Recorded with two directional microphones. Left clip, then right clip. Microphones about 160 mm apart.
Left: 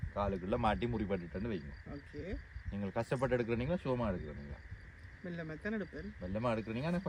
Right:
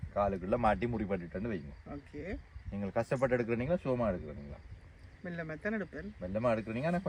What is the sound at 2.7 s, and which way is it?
Speech, 20° left (ahead or behind).